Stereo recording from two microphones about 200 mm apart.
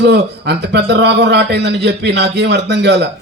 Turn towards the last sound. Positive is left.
turn(degrees=-60)  # may be behind; listen again after turning